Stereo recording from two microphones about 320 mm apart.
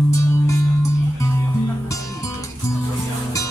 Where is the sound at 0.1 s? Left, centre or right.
Centre.